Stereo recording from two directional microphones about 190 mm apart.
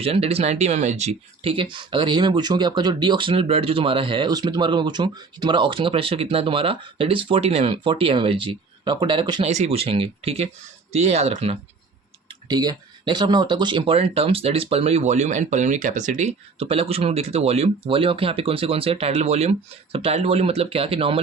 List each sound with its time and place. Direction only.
0.0 s speech: 30° right (ahead or behind)
12.3 s speech: 20° right (ahead or behind)